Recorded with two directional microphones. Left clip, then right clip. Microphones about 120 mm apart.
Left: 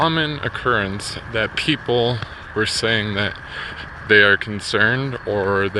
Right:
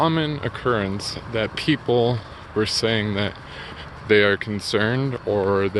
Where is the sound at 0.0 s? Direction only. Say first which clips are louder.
Left 2 dB; 25° right (ahead or behind).